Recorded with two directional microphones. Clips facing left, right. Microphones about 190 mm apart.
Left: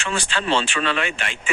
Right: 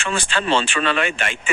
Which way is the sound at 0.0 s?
50° right (ahead or behind).